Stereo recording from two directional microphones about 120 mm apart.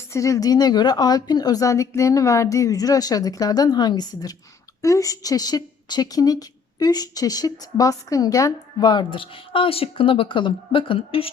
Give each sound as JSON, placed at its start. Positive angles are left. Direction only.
{"t": 0.1, "sound": "a woman's voice", "side_deg": 25}